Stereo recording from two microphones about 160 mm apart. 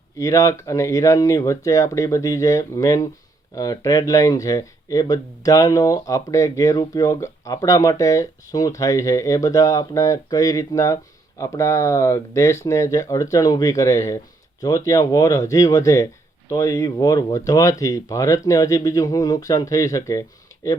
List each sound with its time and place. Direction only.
0.2 s speech: 20° left (ahead or behind)